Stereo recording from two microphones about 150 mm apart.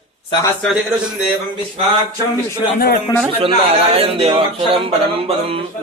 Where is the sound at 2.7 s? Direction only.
75° left (ahead or behind).